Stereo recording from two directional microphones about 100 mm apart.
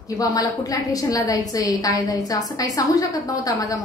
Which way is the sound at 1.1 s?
35° left (ahead or behind).